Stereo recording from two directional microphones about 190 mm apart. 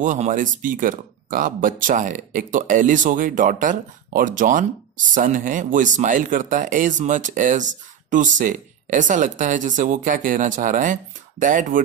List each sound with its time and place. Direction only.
0.0 s speech: 40° right (ahead or behind)